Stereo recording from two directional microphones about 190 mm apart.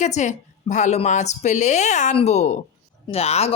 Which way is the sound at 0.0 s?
40° left (ahead or behind).